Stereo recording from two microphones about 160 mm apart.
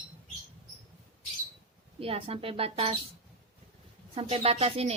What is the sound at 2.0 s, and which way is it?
Speech, 35° right (ahead or behind).